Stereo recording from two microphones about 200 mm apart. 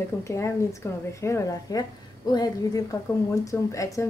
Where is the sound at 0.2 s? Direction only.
15° left (ahead or behind).